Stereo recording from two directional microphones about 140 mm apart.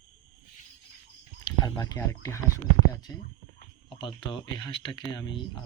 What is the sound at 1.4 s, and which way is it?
Speech, 25° left (ahead or behind).